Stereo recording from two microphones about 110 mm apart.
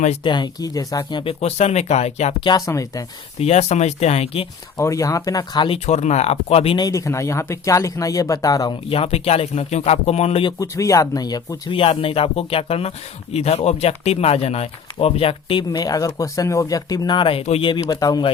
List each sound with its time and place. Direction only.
0.3 s speech: 40° left (ahead or behind)
1.2 s speech: 65° left (ahead or behind); by 2.3 s 85° left
2.4 s speech: 35° left (ahead or behind)
3.4 s speech: 80° left
4.8 s speech: 30° left (ahead or behind)
5.6 s speech: 65° left (ahead or behind)
6.7 s speech: 30° left (ahead or behind)
8.9 s speech: 65° left (ahead or behind)
10.6 s speech: 30° left (ahead or behind)
11.8 s speech: 60° left (ahead or behind)
13.3 s speech: 75° left (ahead or behind); by 17.4 s 50° left (ahead or behind)
17.7 s speech: 35° left (ahead or behind)